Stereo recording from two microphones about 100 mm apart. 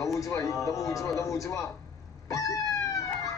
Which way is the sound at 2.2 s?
35° left (ahead or behind).